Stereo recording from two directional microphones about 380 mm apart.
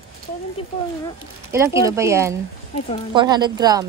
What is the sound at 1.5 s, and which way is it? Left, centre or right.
Speech, centre.